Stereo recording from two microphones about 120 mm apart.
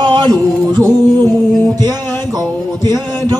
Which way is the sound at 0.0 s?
40° right (ahead or behind).